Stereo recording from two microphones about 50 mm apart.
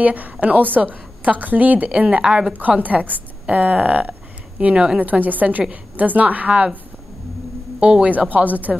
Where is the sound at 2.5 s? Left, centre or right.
Right.